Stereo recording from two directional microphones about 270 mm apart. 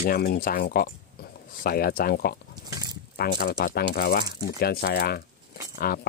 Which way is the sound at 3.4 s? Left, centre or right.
Left.